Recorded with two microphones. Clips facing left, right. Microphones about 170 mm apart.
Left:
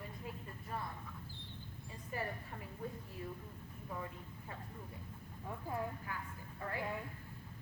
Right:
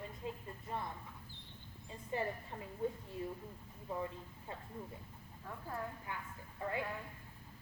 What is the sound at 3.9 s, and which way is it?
Speech, 25° right (ahead or behind).